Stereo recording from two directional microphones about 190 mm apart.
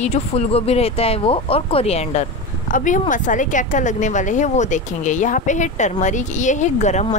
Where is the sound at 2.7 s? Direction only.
45° left (ahead or behind).